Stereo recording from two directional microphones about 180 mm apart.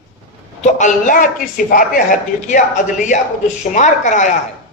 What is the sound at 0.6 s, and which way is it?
A man's voice, 45° left (ahead or behind).